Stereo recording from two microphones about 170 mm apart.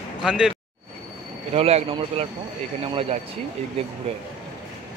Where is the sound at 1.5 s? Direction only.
35° right (ahead or behind).